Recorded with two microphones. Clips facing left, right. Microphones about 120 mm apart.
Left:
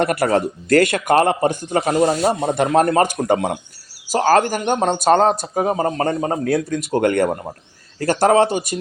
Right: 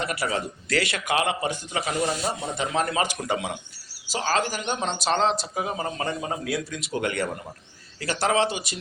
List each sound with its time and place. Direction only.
0.0 s a man's voice: 55° left (ahead or behind)